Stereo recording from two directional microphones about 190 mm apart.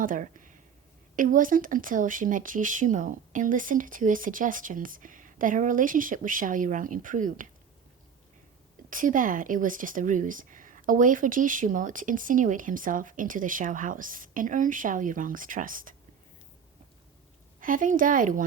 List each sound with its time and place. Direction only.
0.0 s speech: 45° right (ahead or behind)
8.9 s speech: 45° right (ahead or behind)
17.6 s speech: 45° right (ahead or behind)